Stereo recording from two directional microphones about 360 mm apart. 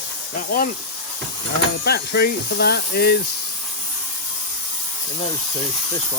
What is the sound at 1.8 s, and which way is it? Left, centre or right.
Speech, left.